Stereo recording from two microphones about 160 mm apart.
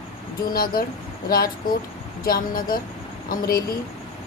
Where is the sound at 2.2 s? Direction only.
65° left (ahead or behind).